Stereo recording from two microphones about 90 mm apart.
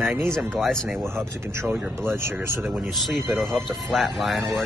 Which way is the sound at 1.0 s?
30° right (ahead or behind).